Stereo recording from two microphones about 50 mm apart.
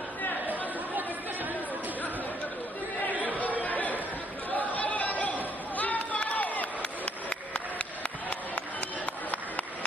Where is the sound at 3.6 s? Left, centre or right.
Left.